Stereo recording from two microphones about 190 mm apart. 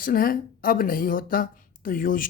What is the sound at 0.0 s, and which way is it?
Speech, 50° left (ahead or behind).